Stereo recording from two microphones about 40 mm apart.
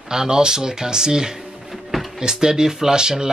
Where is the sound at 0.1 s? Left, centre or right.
Centre.